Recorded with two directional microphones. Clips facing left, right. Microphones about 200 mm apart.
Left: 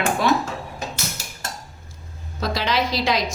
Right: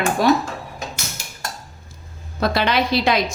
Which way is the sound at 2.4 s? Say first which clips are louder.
Right 4 dB; 60° right (ahead or behind).